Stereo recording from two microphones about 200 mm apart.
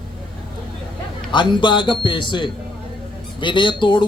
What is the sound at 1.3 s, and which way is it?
A man's voice, 25° left (ahead or behind).